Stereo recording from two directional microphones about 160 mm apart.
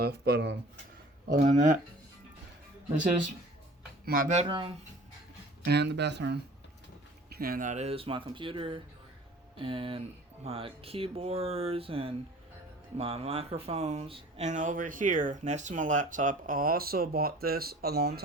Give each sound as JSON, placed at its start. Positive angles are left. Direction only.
{"t": 0.0, "sound": "speech", "side_deg": -85}
{"t": 1.5, "sound": "speech", "side_deg": -50}
{"t": 4.0, "sound": "speech", "side_deg": -60}
{"t": 4.4, "sound": "speech", "side_deg": -30}
{"t": 5.6, "sound": "speech", "side_deg": -90}
{"t": 7.3, "sound": "speech", "side_deg": -70}